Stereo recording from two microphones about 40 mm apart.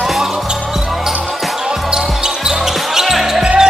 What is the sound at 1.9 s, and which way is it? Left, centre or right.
Basketball bounce, centre.